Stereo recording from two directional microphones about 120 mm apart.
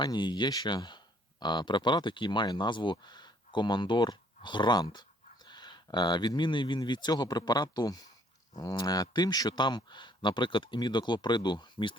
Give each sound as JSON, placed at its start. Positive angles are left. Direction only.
{"t": 0.0, "sound": "speech", "side_deg": 35}